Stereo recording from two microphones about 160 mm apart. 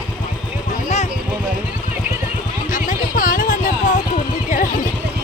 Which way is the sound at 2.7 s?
55° left (ahead or behind).